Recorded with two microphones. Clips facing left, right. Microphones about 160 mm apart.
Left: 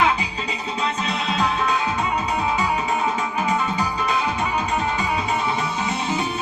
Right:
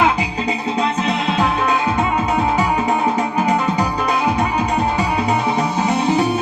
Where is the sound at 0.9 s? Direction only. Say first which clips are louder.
Right 6 dB; 45° right (ahead or behind).